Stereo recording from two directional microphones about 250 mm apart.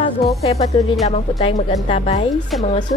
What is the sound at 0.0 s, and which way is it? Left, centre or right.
Music, left.